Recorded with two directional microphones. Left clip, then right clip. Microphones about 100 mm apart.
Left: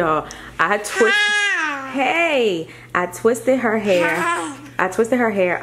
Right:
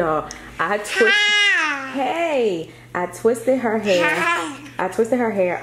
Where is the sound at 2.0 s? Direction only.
20° left (ahead or behind).